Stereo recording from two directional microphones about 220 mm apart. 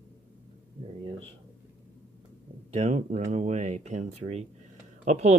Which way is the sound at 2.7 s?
30° right (ahead or behind).